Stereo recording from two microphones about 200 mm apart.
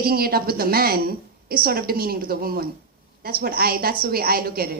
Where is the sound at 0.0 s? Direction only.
50° right (ahead or behind).